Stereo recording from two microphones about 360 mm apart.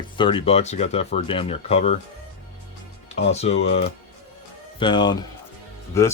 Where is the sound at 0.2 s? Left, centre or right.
Centre.